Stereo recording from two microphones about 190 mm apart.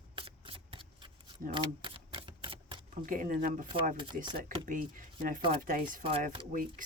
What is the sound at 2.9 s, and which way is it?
Speech, 45° right (ahead or behind).